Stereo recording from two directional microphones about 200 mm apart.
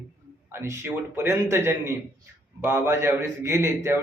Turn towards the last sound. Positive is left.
turn(degrees=-15)  # may be behind; listen again after turning